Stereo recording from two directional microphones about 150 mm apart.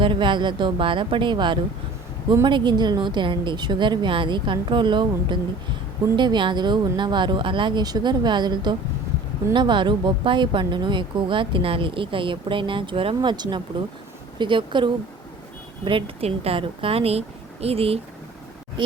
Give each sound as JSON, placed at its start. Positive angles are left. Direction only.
{"t": 0.0, "sound": "speech", "side_deg": -30}